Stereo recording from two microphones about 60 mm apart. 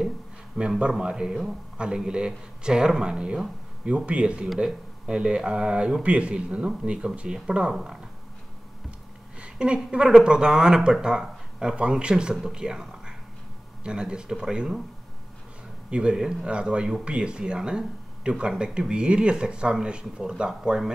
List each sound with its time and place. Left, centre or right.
0.6 s speech: centre
9.4 s a sound: centre
9.8 s speech: centre
15.9 s speech: centre